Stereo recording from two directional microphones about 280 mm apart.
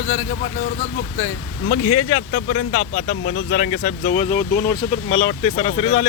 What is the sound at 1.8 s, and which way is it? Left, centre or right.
Speech, left.